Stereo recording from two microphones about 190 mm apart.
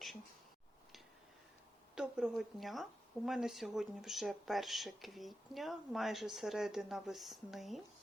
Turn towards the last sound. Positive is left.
turn(degrees=0)  # may be behind; listen again after turning